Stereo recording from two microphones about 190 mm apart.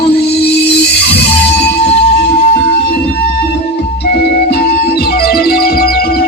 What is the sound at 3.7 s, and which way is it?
Music, 60° left (ahead or behind).